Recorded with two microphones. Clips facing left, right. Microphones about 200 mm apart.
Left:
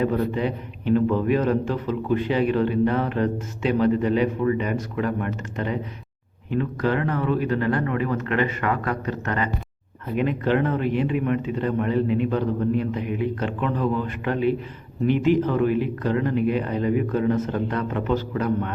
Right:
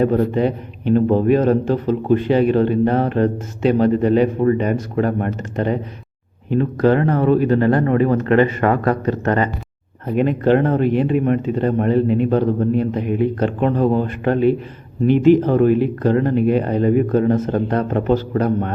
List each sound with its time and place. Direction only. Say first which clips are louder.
0.0 s a man's voice: right 6 dB; 40° right (ahead or behind)